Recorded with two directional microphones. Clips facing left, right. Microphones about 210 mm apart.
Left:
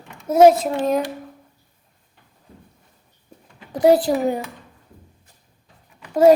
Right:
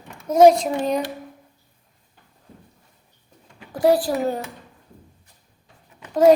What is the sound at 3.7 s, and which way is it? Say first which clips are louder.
Speech: left 3 dB; 20° left (ahead or behind).